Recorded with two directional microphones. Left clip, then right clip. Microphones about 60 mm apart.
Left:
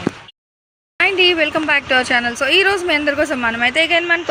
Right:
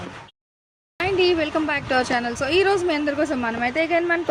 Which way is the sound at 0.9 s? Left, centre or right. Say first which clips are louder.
Left 6 dB; centre.